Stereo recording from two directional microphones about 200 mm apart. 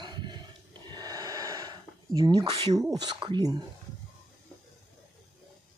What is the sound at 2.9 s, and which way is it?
Speech, 25° right (ahead or behind).